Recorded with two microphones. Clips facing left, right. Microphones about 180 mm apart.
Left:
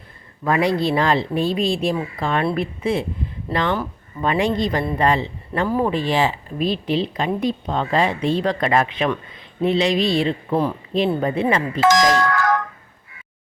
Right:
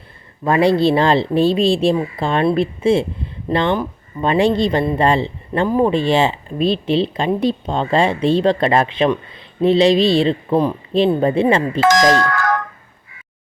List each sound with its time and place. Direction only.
0.4 s a man's voice: 30° right (ahead or behind)
11.8 s speech: 55° right (ahead or behind)
12.0 s speech: 80° right